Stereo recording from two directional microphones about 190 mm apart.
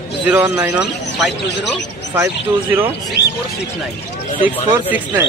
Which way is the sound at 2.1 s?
10° right (ahead or behind).